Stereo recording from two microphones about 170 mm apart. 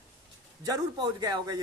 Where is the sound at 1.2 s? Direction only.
20° right (ahead or behind).